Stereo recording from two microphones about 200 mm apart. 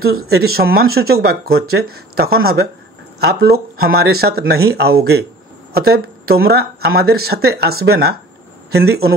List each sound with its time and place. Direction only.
0.0 s speech: 50° right (ahead or behind)